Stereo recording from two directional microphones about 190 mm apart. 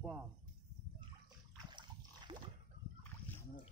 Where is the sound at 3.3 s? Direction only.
10° left (ahead or behind).